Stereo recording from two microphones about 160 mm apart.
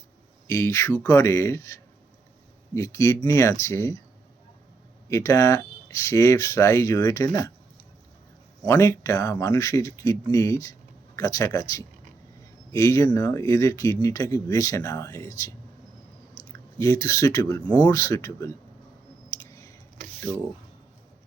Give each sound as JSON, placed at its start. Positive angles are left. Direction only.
{"t": 0.4, "sound": "speech", "side_deg": 20}
{"t": 5.0, "sound": "speech", "side_deg": 20}
{"t": 8.6, "sound": "speech", "side_deg": 15}
{"t": 19.3, "sound": "clicking", "side_deg": 20}